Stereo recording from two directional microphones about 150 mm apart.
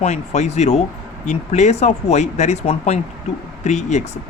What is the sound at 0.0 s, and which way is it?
Speech, 50° left (ahead or behind).